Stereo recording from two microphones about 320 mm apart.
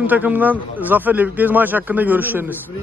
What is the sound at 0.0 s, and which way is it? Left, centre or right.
A man's voice, centre.